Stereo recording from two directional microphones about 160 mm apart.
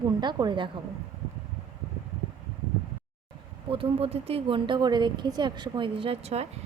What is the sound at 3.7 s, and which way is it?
Speech, 35° right (ahead or behind).